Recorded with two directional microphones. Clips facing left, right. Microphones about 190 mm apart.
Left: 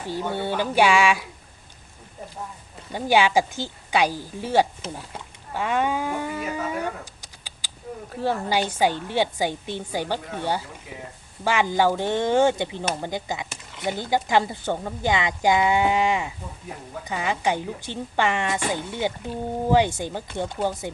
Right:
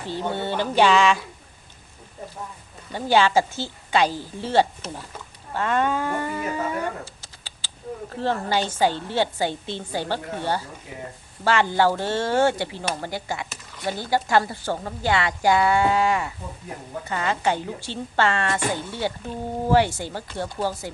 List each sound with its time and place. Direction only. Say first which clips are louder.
0.0 s a woman's voice: even; 10° left (ahead or behind)
2.9 s a woman's voice: even; 15° left (ahead or behind)
5.5 s livestock: right 1 dB; 10° left (ahead or behind)
8.1 s a woman's voice: even; 10° left (ahead or behind)
11.4 s a woman's voice: right 1 dB; 15° left (ahead or behind)